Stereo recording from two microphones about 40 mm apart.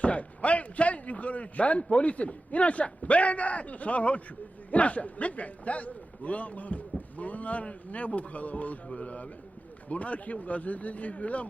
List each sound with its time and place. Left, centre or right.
0.0 s speech: left